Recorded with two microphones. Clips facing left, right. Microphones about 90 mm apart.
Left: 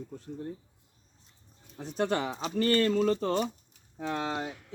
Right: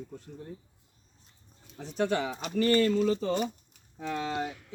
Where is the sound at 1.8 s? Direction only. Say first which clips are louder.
Even; 45° left (ahead or behind).